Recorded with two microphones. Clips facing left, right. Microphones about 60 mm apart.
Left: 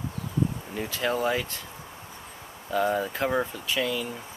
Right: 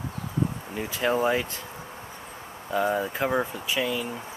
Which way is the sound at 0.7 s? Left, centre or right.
Centre.